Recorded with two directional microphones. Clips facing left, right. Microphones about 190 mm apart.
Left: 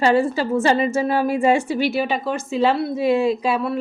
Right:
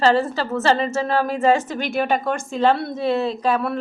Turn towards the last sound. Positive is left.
turn(degrees=10)  # may be behind; listen again after turning